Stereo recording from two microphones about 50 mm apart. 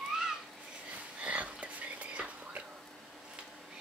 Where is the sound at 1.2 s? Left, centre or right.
Right.